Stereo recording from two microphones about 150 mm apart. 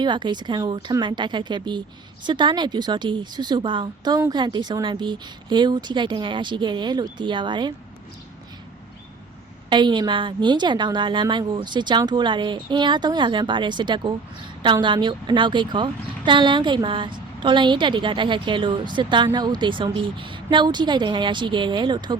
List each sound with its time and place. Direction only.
0.0 s speech: 30° right (ahead or behind)
9.6 s speech: 30° right (ahead or behind)